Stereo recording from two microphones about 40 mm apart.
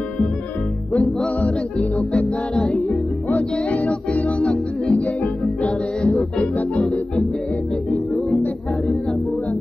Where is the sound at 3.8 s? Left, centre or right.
Left.